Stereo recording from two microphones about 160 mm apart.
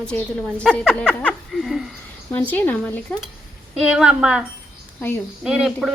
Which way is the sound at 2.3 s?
10° left (ahead or behind).